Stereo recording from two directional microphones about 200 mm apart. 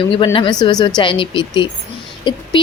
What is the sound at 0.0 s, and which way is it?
A woman's voice, 25° left (ahead or behind).